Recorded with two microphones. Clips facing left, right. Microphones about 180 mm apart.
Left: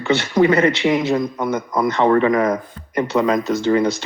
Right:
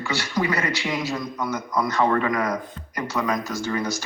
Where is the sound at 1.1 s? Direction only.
60° left (ahead or behind).